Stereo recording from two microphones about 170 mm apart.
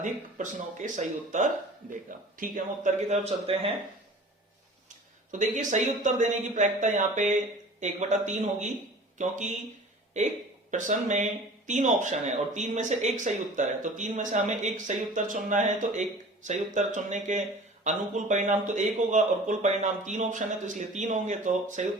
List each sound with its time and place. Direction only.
0.0 s a man's voice: 45° right (ahead or behind)
5.3 s speech: 45° right (ahead or behind)
10.7 s speech: 45° right (ahead or behind)